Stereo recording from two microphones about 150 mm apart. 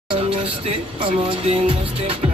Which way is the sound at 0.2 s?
40° right (ahead or behind).